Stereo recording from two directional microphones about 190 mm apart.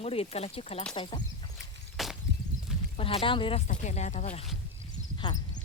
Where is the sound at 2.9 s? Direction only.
30° left (ahead or behind).